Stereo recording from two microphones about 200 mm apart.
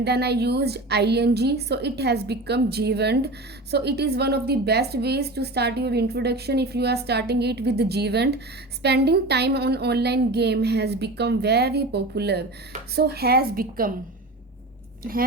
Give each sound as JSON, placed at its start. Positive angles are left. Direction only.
{"t": 0.0, "sound": "a woman's voice", "side_deg": -55}